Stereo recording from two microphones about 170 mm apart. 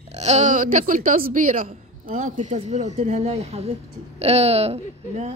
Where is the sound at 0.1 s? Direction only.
40° right (ahead or behind).